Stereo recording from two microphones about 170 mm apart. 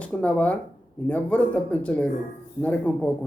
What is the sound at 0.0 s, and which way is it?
Speech, 10° left (ahead or behind).